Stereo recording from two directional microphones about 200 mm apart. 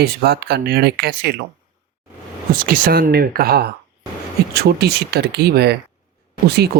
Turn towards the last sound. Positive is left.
turn(degrees=-55)  # may be behind; listen again after turning